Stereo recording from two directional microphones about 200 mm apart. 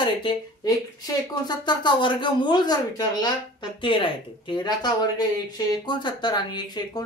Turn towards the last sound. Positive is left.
turn(degrees=20)  # may be behind; listen again after turning